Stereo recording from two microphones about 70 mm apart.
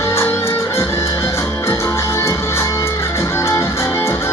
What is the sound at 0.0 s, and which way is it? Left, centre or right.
Music, left.